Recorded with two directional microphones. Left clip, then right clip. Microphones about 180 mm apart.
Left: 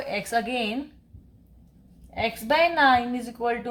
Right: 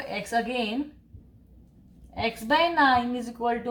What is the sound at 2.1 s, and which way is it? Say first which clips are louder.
Speech: left 1 dB; 40° left (ahead or behind).